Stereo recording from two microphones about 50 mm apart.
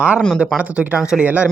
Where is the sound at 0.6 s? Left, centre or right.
Right.